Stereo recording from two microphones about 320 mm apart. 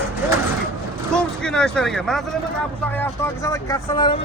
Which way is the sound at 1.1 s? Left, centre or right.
Centre.